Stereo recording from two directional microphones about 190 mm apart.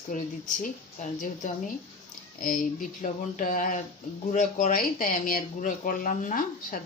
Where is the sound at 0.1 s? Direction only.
45° left (ahead or behind).